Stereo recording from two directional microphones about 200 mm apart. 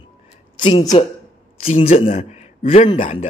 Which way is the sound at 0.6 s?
25° left (ahead or behind).